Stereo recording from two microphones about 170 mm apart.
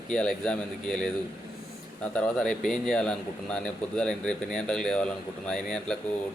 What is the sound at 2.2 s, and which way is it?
Speech, 5° left (ahead or behind).